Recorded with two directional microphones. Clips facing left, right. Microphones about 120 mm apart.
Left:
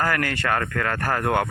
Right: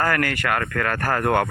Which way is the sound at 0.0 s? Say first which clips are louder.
Right 2 dB; 15° left (ahead or behind).